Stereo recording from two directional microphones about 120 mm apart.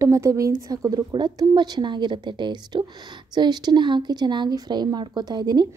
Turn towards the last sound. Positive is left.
turn(degrees=-35)  # may be behind; listen again after turning